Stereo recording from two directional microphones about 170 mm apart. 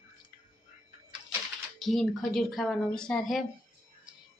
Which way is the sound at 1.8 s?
Centre (ahead or behind).